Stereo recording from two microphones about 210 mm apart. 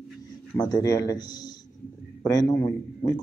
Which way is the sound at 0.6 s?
20° left (ahead or behind).